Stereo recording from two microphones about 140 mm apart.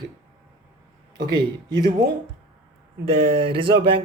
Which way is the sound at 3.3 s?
40° right (ahead or behind).